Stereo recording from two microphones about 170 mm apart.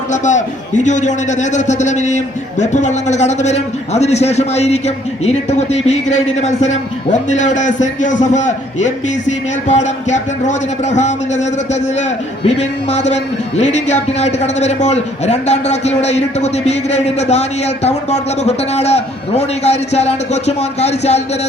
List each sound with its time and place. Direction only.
0.1 s a man's voice: 45° left (ahead or behind)